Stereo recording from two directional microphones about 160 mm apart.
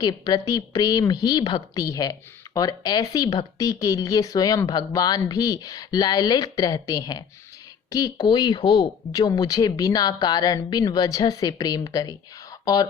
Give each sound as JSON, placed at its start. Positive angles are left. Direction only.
{"t": 0.0, "sound": "speech", "side_deg": 25}